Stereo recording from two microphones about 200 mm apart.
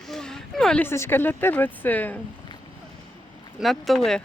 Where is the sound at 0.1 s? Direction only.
5° left (ahead or behind).